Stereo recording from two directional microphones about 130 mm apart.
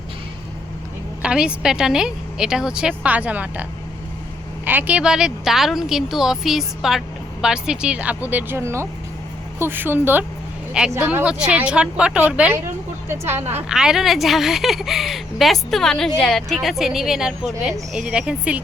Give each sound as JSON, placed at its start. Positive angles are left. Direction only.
{"t": 1.2, "sound": "a woman's voice", "side_deg": -10}
{"t": 13.7, "sound": "a woman's voice", "side_deg": -5}